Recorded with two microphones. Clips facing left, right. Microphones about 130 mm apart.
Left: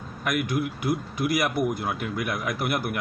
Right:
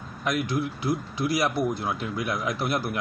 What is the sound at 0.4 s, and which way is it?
Speech, 55° left (ahead or behind).